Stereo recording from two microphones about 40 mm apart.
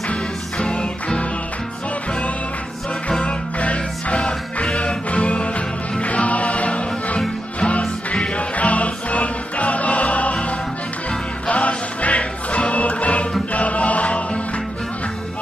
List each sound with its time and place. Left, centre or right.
0.1 s music: left
3.1 s music: left